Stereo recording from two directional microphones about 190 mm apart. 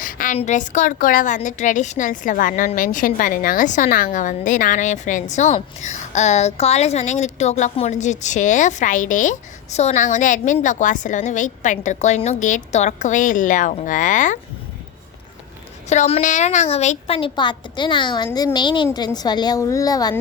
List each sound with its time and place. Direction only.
0.0 s a sound: 45° left (ahead or behind)
0.3 s a woman's voice: 40° left (ahead or behind)
15.9 s a woman's voice: 35° left (ahead or behind)